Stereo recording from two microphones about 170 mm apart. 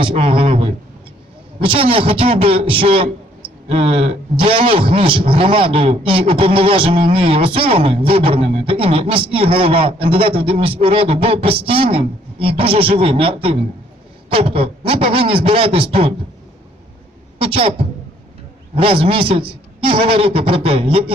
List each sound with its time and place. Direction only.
0.0 s a man's voice: 30° right (ahead or behind)
17.3 s a man's voice: 35° right (ahead or behind)